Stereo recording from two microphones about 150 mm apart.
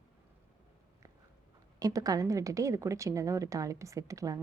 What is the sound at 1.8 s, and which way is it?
Speech, 25° right (ahead or behind).